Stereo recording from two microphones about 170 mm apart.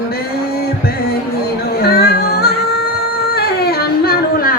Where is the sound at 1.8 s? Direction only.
65° left (ahead or behind).